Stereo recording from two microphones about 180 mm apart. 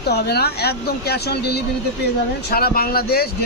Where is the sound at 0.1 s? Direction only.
60° left (ahead or behind).